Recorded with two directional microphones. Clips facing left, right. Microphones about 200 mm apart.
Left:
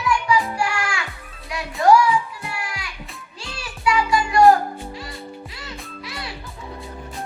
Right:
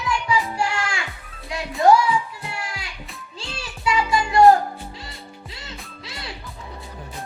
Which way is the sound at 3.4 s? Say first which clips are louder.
Left 2 dB; 25° right (ahead or behind).